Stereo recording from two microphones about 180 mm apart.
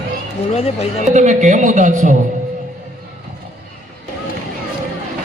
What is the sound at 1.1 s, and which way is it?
A man's voice, 45° right (ahead or behind).